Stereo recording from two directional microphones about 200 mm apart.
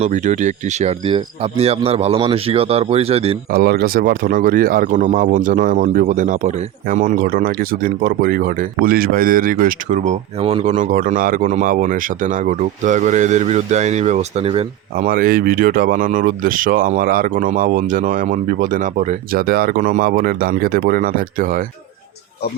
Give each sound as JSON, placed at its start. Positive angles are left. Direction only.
{"t": 0.0, "sound": "speech", "side_deg": -35}
{"t": 3.5, "sound": "speech", "side_deg": -50}
{"t": 14.9, "sound": "speech", "side_deg": -45}